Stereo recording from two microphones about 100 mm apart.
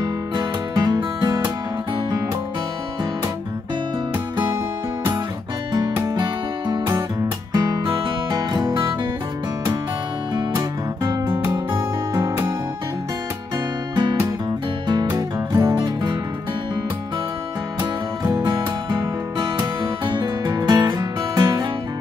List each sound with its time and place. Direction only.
0.0 s music: 40° right (ahead or behind)
5.7 s music: 45° right (ahead or behind)
11.2 s music: 25° right (ahead or behind)
15.0 s music: 30° right (ahead or behind)
15.8 s music: 45° right (ahead or behind)
18.3 s music: 40° right (ahead or behind)